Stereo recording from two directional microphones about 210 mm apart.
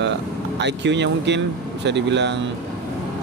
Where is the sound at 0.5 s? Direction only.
55° right (ahead or behind).